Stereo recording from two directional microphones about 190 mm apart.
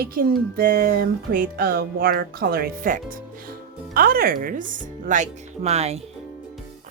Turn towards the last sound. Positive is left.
turn(degrees=-35)  # may be behind; listen again after turning